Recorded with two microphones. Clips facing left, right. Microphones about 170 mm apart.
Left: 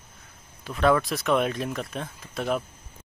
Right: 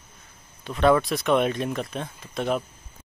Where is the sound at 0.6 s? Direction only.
Centre (ahead or behind).